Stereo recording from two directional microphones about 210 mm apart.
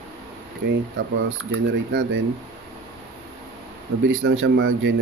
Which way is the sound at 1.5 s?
60° right (ahead or behind).